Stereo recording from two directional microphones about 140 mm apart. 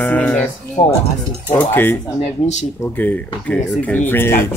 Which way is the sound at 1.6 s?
15° left (ahead or behind).